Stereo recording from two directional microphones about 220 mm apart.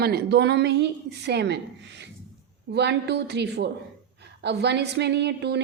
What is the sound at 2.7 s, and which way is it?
A woman's voice, 50° right (ahead or behind).